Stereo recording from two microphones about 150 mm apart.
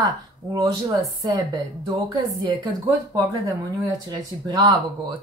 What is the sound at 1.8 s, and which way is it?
Speech, 30° right (ahead or behind).